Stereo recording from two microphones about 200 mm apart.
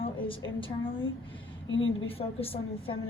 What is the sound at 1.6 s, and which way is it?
Speech, 70° left (ahead or behind).